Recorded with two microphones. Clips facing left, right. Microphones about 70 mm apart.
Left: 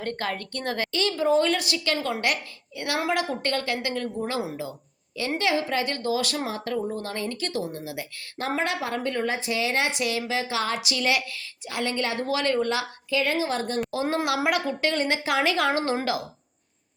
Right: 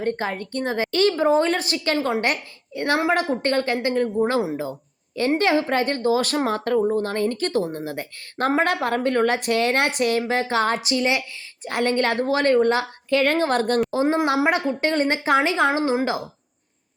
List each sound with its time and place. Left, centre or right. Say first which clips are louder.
0.0 s speech: right 5 dB; centre
0.9 s a woman's voice: right 5 dB; right
11.6 s a woman's voice: right 7 dB; right
12.2 s a woman's voice: right 6 dB; right
13.1 s a woman's voice: right 6 dB; right
13.9 s speech: right 5 dB; right
15.8 s a woman's voice: right 5 dB; centre